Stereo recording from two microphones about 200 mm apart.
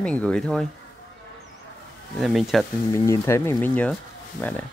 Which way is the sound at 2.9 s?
15° left (ahead or behind).